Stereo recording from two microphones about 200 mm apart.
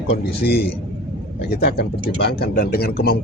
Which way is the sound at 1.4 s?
50° left (ahead or behind).